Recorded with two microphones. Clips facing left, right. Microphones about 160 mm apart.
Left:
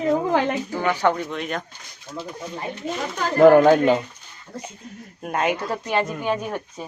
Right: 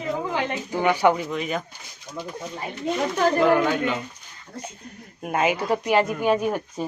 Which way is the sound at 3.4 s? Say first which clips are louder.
Left 13 dB; 45° left (ahead or behind).